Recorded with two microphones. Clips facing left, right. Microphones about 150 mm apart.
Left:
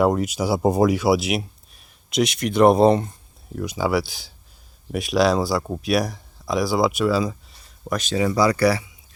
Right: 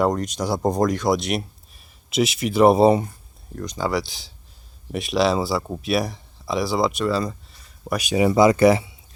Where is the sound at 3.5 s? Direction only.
5° left (ahead or behind).